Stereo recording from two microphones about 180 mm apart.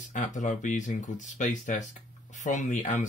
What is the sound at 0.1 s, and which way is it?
Speech, 45° left (ahead or behind).